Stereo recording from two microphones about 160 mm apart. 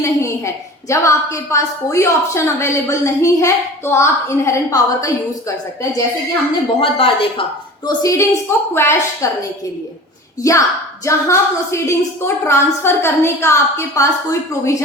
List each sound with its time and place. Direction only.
0.0 s a woman's voice: 20° left (ahead or behind)
6.8 s speech: 35° left (ahead or behind)
7.9 s a woman's voice: 20° left (ahead or behind)
10.4 s speech: 20° left (ahead or behind)